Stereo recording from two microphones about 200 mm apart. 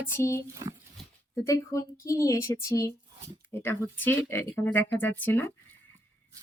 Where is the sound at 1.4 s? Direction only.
15° left (ahead or behind).